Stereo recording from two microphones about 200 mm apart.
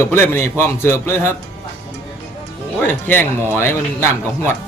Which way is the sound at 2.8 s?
10° left (ahead or behind).